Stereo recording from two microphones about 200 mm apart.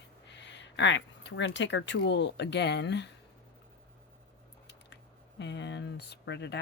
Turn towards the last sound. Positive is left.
turn(degrees=60)  # may be behind; listen again after turning